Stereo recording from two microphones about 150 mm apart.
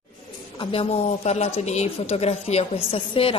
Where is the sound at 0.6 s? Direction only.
40° left (ahead or behind).